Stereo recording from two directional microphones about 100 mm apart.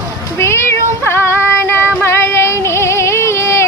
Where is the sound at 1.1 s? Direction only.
25° left (ahead or behind).